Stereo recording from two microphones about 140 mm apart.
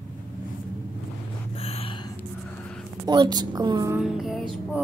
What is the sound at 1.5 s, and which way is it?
Gasp, 45° left (ahead or behind).